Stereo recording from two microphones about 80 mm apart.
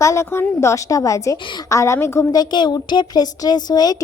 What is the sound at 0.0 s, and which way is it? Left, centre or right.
A woman's voice, left.